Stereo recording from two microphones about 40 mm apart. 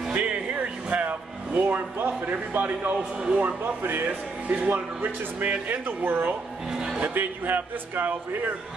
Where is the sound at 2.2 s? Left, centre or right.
Right.